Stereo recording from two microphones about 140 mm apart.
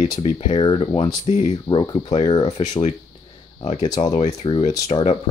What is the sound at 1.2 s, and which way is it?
Speech, 50° left (ahead or behind).